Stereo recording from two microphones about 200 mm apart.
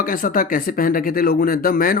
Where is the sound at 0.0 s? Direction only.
45° left (ahead or behind).